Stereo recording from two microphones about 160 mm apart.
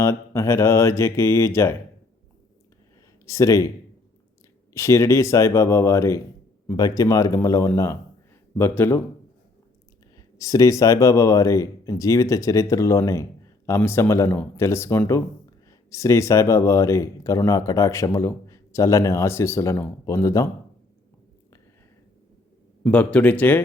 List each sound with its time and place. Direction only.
0.0 s speech: 15° left (ahead or behind)
3.2 s speech: 20° left (ahead or behind)
4.7 s speech: 15° left (ahead or behind)
10.2 s speech: 20° left (ahead or behind)
22.8 s speech: 10° left (ahead or behind)